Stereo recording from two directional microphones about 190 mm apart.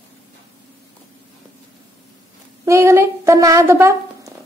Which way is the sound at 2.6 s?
15° right (ahead or behind).